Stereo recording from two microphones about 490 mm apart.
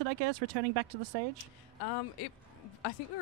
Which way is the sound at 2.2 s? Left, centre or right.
Left.